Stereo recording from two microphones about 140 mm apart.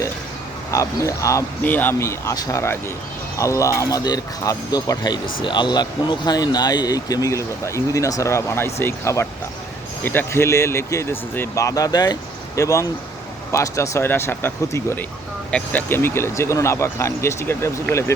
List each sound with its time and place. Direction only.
0.7 s speech: 20° left (ahead or behind)